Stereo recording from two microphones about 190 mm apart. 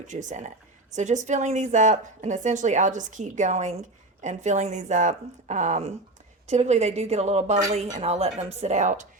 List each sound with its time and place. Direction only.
0.1 s speech: 40° right (ahead or behind)